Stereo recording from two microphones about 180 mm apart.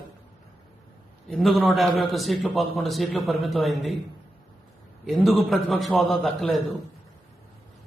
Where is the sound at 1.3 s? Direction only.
Centre (ahead or behind).